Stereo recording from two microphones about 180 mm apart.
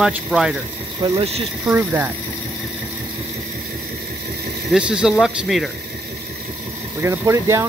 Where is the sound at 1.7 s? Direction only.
5° right (ahead or behind).